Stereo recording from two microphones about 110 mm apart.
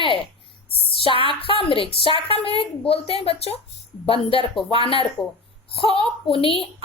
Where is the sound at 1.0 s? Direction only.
55° left (ahead or behind).